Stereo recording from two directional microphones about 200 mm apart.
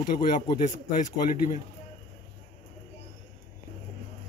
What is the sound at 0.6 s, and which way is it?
Speech, 40° left (ahead or behind).